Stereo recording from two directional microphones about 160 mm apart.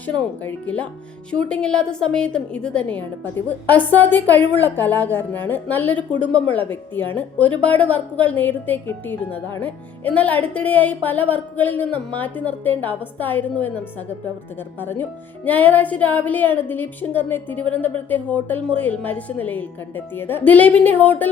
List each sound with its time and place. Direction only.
0.0 s a woman's voice: 10° left (ahead or behind)